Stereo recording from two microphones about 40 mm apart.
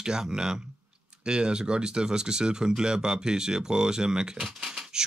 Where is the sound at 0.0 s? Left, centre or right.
Centre.